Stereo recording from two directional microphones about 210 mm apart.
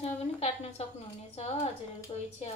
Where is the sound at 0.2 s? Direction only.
30° left (ahead or behind).